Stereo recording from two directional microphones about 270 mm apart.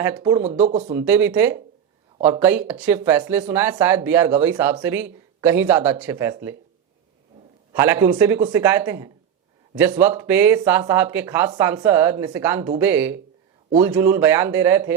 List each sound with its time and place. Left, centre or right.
0.0 s speech: centre
0.6 s speech: right
0.9 s speech: centre
7.7 s speech: centre